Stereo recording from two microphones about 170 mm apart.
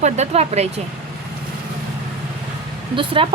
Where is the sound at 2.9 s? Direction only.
30° right (ahead or behind).